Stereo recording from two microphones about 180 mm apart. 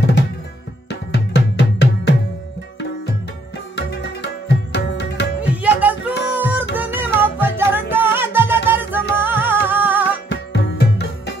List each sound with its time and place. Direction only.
0.8 s music: 70° left (ahead or behind)
4.7 s tabla: 70° left (ahead or behind)
5.4 s music: 10° right (ahead or behind)
10.3 s music: 75° left (ahead or behind)